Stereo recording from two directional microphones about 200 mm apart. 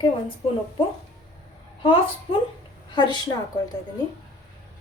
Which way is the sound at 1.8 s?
25° left (ahead or behind).